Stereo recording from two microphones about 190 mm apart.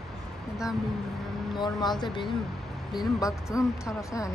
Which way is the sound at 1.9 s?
25° left (ahead or behind).